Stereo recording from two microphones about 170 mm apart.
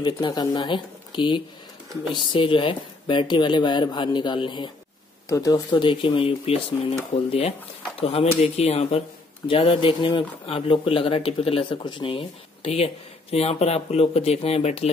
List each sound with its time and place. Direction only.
0.0 s speech: 25° left (ahead or behind)
5.7 s speech: 30° left (ahead or behind)